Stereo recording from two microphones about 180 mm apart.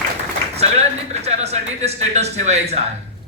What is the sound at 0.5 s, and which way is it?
A man's voice, 35° right (ahead or behind).